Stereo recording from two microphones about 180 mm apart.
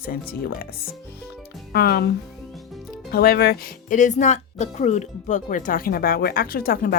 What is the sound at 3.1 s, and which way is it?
Speech, 60° left (ahead or behind).